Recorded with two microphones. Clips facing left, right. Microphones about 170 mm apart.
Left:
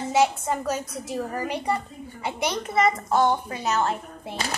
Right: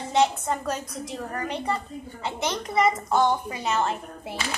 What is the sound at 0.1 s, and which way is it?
A woman's voice, 5° left (ahead or behind).